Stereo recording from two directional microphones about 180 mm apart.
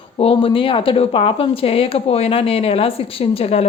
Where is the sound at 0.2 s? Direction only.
30° left (ahead or behind).